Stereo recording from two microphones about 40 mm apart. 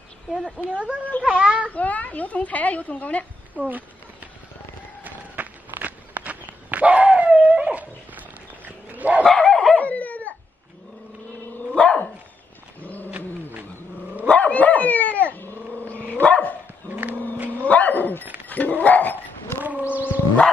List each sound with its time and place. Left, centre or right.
0.7 s a child's voice: right
1.7 s speech: left
3.5 s a sound: right
5.0 s walk: right
9.5 s dog: centre
9.8 s dog: left
11.8 s dog: left
12.8 s cat: left
13.1 s cat: right
14.2 s dog: left
17.1 s a sound: right
17.6 s dog: left
19.6 s horse: right